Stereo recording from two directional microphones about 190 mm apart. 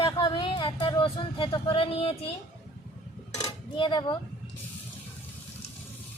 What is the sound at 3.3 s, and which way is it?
Dishes, 20° left (ahead or behind).